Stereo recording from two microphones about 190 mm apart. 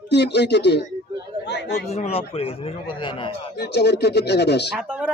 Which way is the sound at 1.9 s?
35° left (ahead or behind).